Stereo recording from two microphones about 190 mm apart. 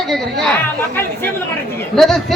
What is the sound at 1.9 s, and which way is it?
Speech, centre (ahead or behind).